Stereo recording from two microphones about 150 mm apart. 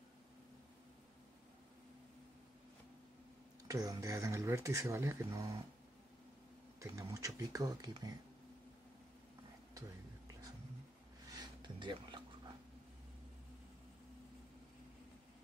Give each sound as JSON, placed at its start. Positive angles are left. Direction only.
{"t": 3.6, "sound": "speech", "side_deg": -25}
{"t": 6.8, "sound": "speech", "side_deg": -20}
{"t": 11.3, "sound": "a sound", "side_deg": -30}